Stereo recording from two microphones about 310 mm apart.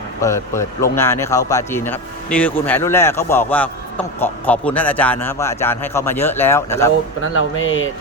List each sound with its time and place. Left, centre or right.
0.2 s speech: centre
7.2 s speech: left